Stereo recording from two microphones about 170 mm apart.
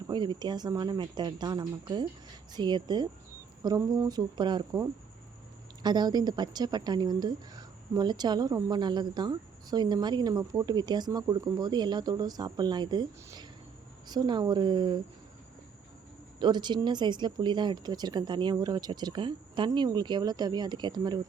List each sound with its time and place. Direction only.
0.1 s speech: 25° right (ahead or behind)
16.4 s speech: 25° right (ahead or behind)